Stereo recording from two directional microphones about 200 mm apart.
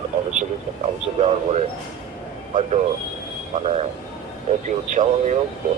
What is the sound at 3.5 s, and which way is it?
Speech, 40° right (ahead or behind).